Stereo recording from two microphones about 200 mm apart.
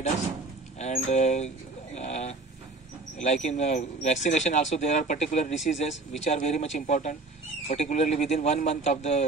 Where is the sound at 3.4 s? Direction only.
35° left (ahead or behind).